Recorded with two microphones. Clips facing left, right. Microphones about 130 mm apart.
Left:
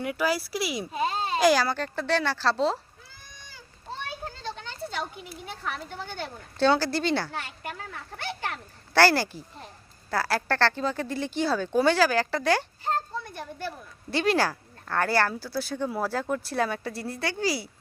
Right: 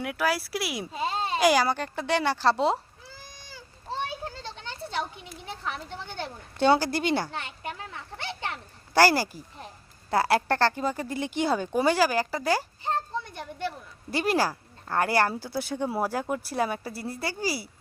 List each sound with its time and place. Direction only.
0.0 s speech: centre (ahead or behind)
0.9 s babbling: 25° right (ahead or behind)
1.4 s speech: 10° right (ahead or behind)
4.5 s a sound: 20° right (ahead or behind)
5.6 s speech: 25° right (ahead or behind)
9.0 s speech: 10° right (ahead or behind)
10.1 s speech: 25° right (ahead or behind); by 12.6 s 5° right (ahead or behind)
12.8 s a sound: 20° right (ahead or behind)
14.1 s speech: 10° right (ahead or behind)